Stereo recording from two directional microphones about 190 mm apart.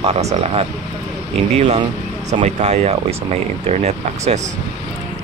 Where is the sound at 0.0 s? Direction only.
35° right (ahead or behind).